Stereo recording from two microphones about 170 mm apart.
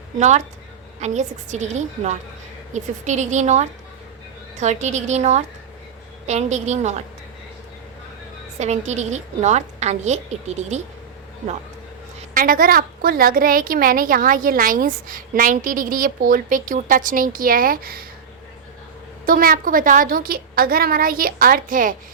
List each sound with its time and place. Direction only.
0.2 s a woman's voice: 45° right (ahead or behind)
8.5 s a woman's voice: 40° right (ahead or behind)
12.3 s a woman's voice: 55° right (ahead or behind)
19.2 s a woman's voice: 55° right (ahead or behind)